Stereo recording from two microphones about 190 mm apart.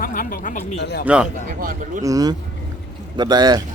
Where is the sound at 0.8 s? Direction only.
60° left (ahead or behind).